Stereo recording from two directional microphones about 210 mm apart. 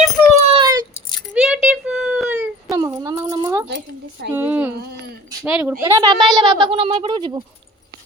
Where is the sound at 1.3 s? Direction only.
Centre (ahead or behind).